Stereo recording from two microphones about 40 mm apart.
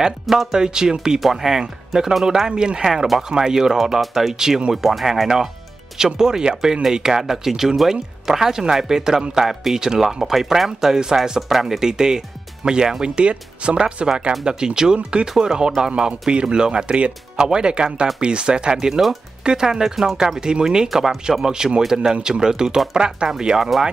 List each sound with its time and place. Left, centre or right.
0.0 s speech: centre
2.8 s speech: centre
5.9 s speech: centre
16.1 s speech: right; by 21.5 s centre
21.5 s speech: centre